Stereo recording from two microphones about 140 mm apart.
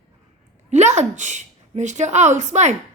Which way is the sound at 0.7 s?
55° right (ahead or behind).